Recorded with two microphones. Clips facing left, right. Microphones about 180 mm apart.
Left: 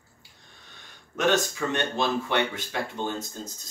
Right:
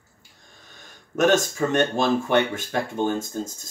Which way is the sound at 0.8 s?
45° right (ahead or behind).